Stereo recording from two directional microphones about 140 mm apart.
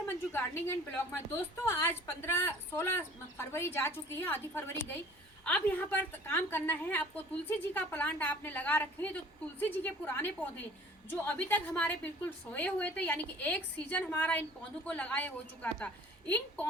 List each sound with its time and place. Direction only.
0.3 s a woman's voice: 15° left (ahead or behind)